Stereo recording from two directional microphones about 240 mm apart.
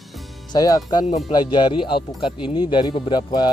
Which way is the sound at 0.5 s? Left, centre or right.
Centre.